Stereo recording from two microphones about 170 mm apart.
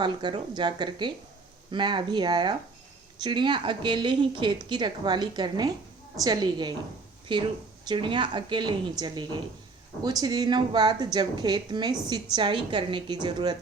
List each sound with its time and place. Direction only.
0.0 s a woman's voice: 25° right (ahead or behind)